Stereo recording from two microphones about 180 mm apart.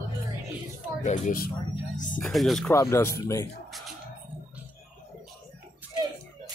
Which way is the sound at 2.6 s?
15° left (ahead or behind).